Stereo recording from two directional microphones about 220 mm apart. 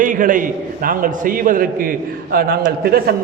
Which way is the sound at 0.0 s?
35° right (ahead or behind).